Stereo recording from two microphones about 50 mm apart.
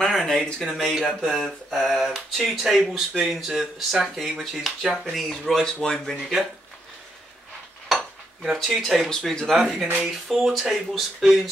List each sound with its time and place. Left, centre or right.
0.0 s a sound: centre
0.6 s speech: centre
7.9 s cutlery: centre
8.5 s speech: centre
8.8 s speech: centre
9.1 s speech: centre